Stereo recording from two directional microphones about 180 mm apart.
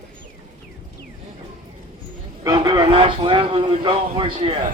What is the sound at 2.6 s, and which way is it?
A man's voice, 25° right (ahead or behind).